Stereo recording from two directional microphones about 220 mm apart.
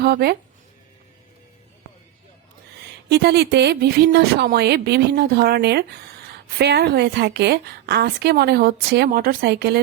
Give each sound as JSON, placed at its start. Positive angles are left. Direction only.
{"t": 0.0, "sound": "a woman's voice", "side_deg": -45}
{"t": 3.1, "sound": "a woman's voice", "side_deg": -50}